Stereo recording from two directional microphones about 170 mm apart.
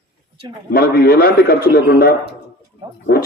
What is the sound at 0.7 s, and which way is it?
A man's voice, 65° left (ahead or behind).